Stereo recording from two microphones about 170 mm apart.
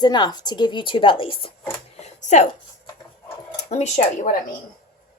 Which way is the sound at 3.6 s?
40° left (ahead or behind).